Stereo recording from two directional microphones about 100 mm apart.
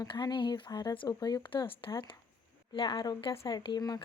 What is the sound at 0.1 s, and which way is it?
Speech, 50° left (ahead or behind).